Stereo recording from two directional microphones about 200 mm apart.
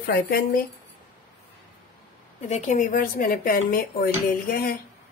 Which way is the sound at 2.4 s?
35° left (ahead or behind).